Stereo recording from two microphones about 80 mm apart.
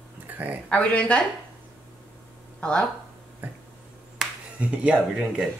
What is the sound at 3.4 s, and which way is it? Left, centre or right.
Speech, right.